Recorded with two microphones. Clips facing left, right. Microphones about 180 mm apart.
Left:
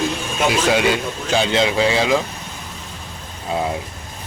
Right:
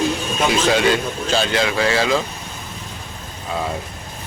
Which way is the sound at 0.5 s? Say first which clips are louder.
Right 1 dB; 10° left (ahead or behind).